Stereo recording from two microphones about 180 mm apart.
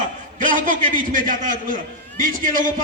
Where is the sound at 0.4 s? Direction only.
45° right (ahead or behind).